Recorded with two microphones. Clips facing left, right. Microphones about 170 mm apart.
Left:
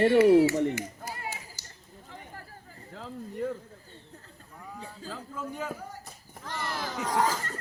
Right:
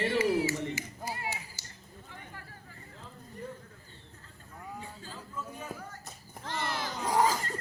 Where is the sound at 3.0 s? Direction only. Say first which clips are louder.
Left 11 dB; 90° left.